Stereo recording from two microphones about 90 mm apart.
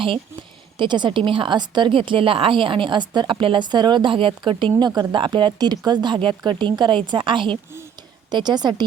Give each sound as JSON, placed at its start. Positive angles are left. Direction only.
{"t": 0.8, "sound": "a woman's voice", "side_deg": -60}
{"t": 4.8, "sound": "a woman's voice", "side_deg": -50}
{"t": 8.3, "sound": "speech", "side_deg": -50}